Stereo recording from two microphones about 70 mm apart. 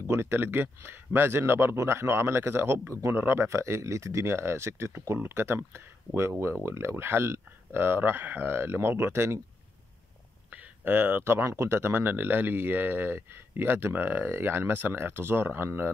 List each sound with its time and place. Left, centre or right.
0.0 s speech: right
10.5 s speech: right